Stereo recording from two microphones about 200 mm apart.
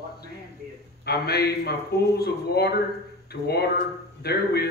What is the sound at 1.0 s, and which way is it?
Speech, 50° left (ahead or behind).